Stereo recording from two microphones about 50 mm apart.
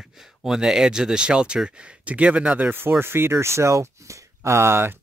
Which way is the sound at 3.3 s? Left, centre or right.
Right.